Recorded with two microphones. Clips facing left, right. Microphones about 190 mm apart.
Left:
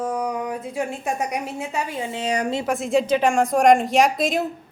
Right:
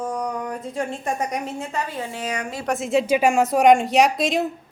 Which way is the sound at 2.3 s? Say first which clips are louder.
Left 6 dB; 35° left (ahead or behind).